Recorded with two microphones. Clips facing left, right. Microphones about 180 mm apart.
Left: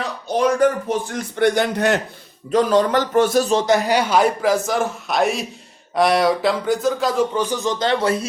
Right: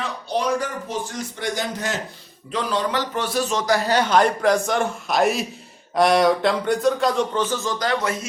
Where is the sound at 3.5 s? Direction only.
20° left (ahead or behind).